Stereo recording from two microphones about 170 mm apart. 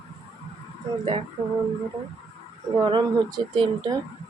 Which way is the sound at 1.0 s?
30° right (ahead or behind).